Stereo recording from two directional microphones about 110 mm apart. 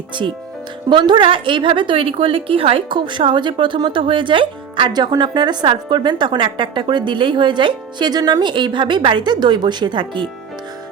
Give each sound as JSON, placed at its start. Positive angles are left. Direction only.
{"t": 0.1, "sound": "a woman's voice", "side_deg": -45}